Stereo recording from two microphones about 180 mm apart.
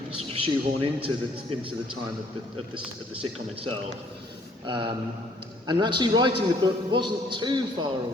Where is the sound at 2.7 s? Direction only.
30° right (ahead or behind).